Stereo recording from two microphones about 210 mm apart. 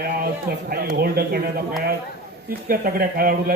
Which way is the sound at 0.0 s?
45° right (ahead or behind).